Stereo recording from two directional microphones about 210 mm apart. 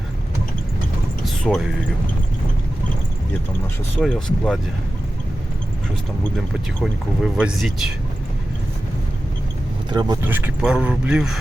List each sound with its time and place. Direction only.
1.2 s a sound: centre (ahead or behind)
4.0 s speech: centre (ahead or behind)
6.3 s speech: centre (ahead or behind)
9.9 s speech: 20° right (ahead or behind)
10.2 s speech: 10° right (ahead or behind)